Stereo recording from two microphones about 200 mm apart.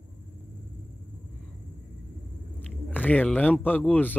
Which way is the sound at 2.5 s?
10° left (ahead or behind).